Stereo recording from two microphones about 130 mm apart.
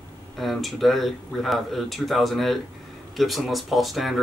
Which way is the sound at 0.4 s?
Centre (ahead or behind).